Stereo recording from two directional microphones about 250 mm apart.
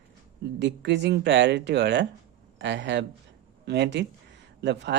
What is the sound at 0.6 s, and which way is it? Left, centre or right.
Speech, right.